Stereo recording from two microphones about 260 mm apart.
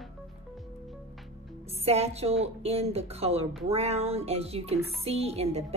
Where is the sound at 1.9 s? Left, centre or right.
Right.